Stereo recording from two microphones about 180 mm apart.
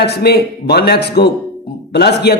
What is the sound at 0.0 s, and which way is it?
A man's voice, 65° left (ahead or behind).